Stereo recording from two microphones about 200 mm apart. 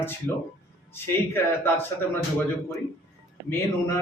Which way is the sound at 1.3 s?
10° left (ahead or behind).